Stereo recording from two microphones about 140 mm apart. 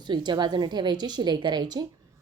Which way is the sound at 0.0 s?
35° right (ahead or behind).